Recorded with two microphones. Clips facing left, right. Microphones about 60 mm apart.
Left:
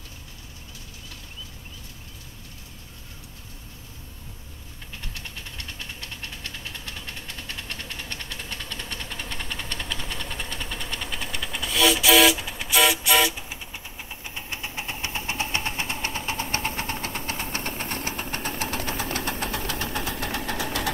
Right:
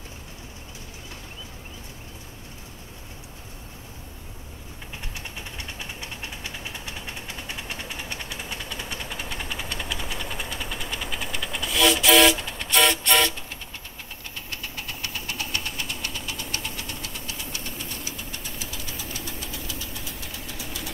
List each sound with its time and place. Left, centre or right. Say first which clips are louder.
5.1 s vehicle: right 2 dB; centre
14.3 s engine: left 2 dB; left